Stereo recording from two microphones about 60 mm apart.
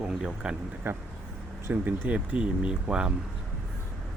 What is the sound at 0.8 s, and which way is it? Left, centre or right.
Speech, right.